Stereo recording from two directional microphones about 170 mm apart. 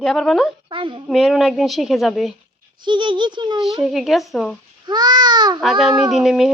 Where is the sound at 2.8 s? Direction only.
25° right (ahead or behind).